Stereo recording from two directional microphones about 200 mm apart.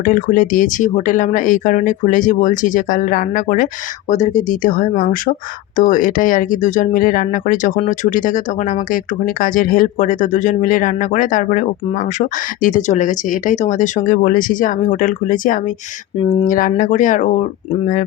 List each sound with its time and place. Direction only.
0.0 s speech: 40° left (ahead or behind)